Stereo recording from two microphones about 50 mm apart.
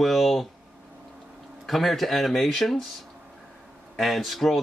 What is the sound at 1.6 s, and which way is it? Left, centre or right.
Speech, centre.